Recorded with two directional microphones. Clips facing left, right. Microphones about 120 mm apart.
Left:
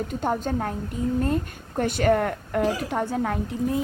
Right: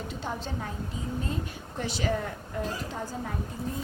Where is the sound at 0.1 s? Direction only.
50° left (ahead or behind).